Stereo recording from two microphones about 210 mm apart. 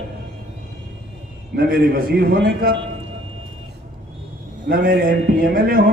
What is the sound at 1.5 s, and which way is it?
A man's voice, 45° right (ahead or behind).